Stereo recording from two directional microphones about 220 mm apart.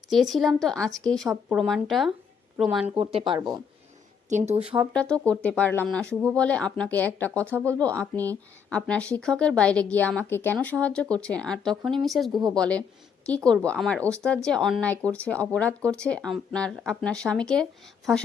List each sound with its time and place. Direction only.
0.1 s a woman's voice: centre (ahead or behind)
2.9 s speech: 25° right (ahead or behind)
4.9 s a woman's voice: 5° left (ahead or behind)